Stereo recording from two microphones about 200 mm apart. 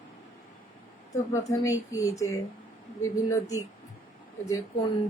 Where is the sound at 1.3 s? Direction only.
15° left (ahead or behind).